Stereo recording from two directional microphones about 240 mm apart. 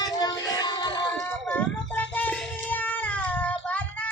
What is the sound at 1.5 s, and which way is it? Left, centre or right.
Child singing, centre.